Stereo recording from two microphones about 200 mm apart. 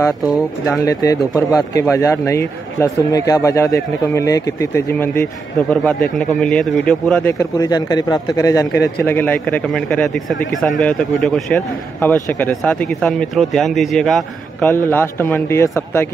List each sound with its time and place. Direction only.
0.7 s speech: 15° left (ahead or behind)
7.3 s speech: 20° left (ahead or behind)